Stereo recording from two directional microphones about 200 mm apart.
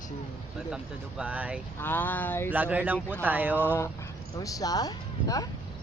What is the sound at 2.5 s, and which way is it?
Speech, 5° right (ahead or behind).